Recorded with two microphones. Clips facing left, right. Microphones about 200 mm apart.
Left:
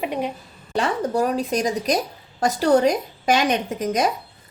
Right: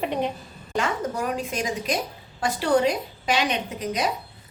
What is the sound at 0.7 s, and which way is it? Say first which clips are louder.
A woman's voice: left 4 dB; 35° left (ahead or behind).